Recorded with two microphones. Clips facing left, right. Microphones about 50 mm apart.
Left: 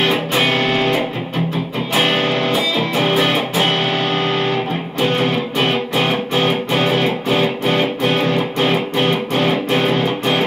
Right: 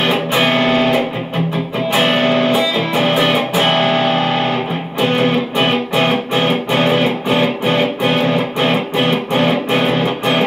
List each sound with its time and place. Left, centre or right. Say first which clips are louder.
0.0 s music: right 2 dB; centre
2.0 s music: right 3 dB; right